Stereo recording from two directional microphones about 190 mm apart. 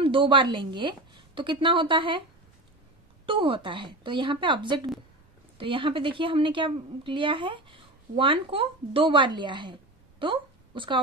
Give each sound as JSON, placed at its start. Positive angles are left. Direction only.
{"t": 0.0, "sound": "a woman's voice", "side_deg": -25}
{"t": 3.3, "sound": "a woman's voice", "side_deg": -25}